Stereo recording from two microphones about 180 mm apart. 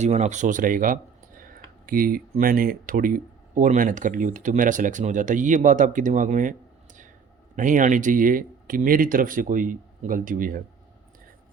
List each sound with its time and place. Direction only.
0.0 s speech: 40° right (ahead or behind)